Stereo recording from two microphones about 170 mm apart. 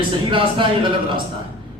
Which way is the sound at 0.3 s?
30° right (ahead or behind).